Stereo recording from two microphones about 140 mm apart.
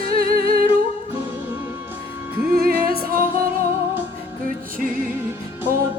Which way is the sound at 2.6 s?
90° right.